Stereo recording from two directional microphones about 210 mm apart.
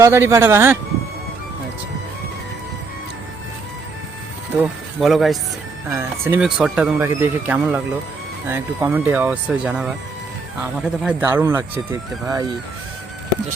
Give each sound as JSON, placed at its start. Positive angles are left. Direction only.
{"t": 0.0, "sound": "speech", "side_deg": -15}
{"t": 4.5, "sound": "speech", "side_deg": -5}
{"t": 5.9, "sound": "speech", "side_deg": -10}
{"t": 11.0, "sound": "speech", "side_deg": -5}